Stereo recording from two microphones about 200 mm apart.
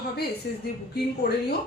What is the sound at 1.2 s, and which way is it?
Speech, 55° left (ahead or behind).